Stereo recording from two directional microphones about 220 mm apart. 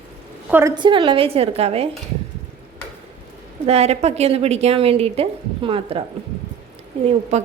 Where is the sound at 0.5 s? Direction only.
15° right (ahead or behind).